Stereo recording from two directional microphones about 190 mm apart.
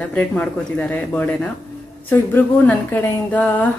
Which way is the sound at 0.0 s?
5° left (ahead or behind).